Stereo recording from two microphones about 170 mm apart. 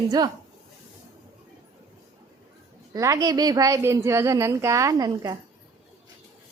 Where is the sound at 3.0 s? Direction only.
20° right (ahead or behind).